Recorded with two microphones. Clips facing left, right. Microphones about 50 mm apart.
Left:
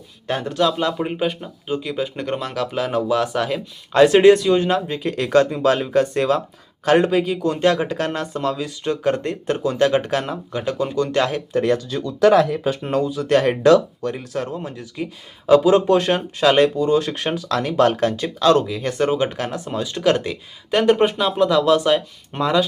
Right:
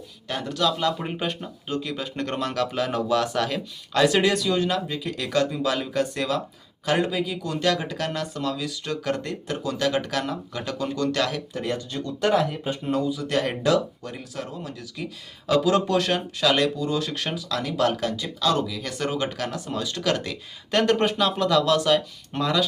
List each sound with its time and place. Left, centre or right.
0.3 s speech: left
0.9 s speech: centre
3.9 s speech: left
11.5 s speech: left
12.3 s speech: left
12.9 s speech: left
14.6 s speech: left
17.3 s speech: left